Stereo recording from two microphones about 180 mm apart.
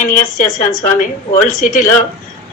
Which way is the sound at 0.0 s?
45° left (ahead or behind).